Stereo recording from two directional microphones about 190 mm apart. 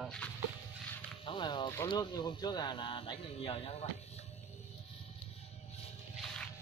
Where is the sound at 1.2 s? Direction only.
25° left (ahead or behind).